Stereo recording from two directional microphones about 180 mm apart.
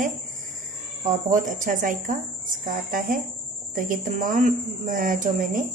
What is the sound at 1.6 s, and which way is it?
Speech, 45° right (ahead or behind).